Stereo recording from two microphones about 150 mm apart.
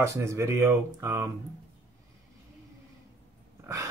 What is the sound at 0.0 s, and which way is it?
Speech, 20° right (ahead or behind).